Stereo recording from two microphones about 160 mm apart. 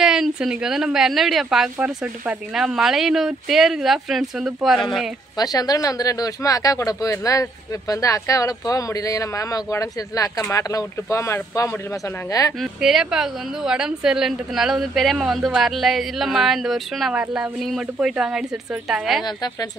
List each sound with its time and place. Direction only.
0.0 s a woman's voice: 5° right (ahead or behind)
5.4 s speech: 25° left (ahead or behind)
12.5 s a woman's voice: centre (ahead or behind)
19.2 s speech: 25° left (ahead or behind)